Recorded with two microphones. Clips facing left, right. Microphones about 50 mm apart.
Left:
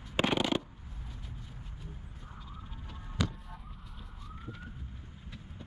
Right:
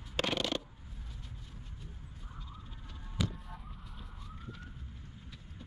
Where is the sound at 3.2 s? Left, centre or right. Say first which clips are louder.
Left 2 dB; centre.